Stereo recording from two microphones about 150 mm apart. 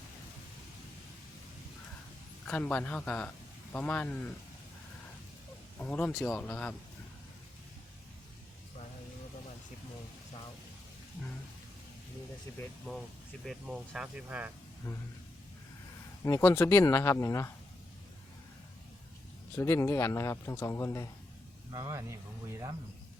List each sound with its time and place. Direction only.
2.5 s speech: 10° left (ahead or behind)
5.8 s speech: 10° left (ahead or behind)
12.9 s speech: 5° left (ahead or behind)
16.2 s speech: 15° left (ahead or behind)
19.5 s speech: 20° left (ahead or behind)
21.7 s speech: 20° right (ahead or behind)